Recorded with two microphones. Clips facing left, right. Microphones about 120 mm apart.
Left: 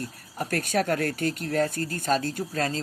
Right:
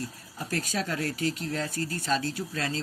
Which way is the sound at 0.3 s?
60° left (ahead or behind).